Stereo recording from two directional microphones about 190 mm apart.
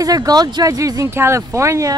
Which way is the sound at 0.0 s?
20° right (ahead or behind).